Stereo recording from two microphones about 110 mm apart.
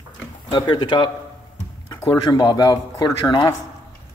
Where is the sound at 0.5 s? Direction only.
40° left (ahead or behind).